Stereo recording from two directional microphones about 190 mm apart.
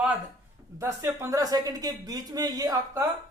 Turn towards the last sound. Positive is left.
turn(degrees=-15)  # may be behind; listen again after turning